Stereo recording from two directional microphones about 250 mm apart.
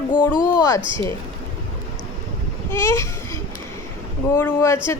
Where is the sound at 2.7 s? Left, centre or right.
Centre.